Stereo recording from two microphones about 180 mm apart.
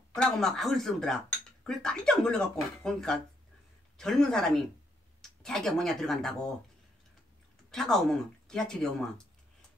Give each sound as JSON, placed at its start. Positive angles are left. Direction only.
{"t": 0.1, "sound": "speech", "side_deg": 5}
{"t": 7.7, "sound": "speech", "side_deg": 0}